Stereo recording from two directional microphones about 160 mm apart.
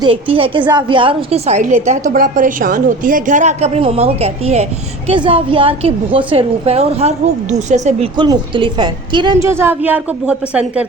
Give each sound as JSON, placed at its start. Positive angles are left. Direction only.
{"t": 0.0, "sound": "a woman's voice", "side_deg": -35}
{"t": 8.1, "sound": "a woman's voice", "side_deg": -25}
{"t": 9.5, "sound": "a woman's voice", "side_deg": -15}